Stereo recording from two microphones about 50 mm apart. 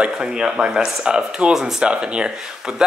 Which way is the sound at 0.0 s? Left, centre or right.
Centre.